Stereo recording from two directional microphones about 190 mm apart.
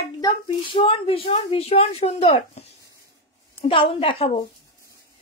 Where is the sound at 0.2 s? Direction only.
25° left (ahead or behind).